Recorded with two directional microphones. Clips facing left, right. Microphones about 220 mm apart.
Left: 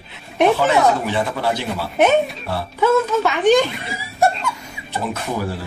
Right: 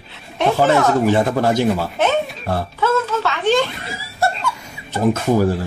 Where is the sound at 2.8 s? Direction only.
15° left (ahead or behind).